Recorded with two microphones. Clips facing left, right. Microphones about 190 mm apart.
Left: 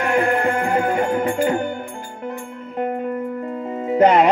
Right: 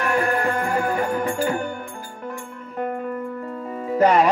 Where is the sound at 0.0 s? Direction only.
25° left (ahead or behind).